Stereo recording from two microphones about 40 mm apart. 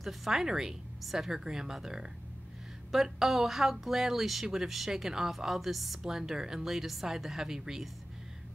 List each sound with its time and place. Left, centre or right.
0.0 s speech: centre